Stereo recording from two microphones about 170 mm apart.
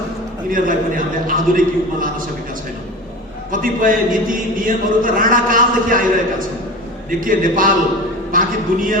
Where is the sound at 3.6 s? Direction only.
55° right (ahead or behind).